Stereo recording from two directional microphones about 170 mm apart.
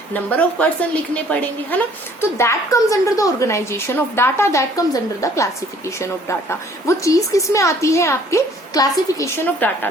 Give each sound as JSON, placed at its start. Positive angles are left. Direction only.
{"t": 0.1, "sound": "a woman's voice", "side_deg": 10}